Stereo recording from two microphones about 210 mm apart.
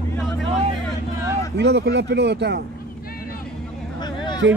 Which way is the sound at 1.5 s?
55° right (ahead or behind).